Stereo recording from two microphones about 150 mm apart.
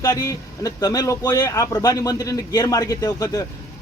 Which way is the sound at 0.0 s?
20° left (ahead or behind).